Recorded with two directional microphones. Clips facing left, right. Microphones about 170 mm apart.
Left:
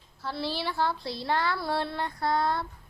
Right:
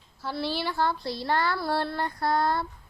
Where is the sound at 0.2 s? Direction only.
Centre (ahead or behind).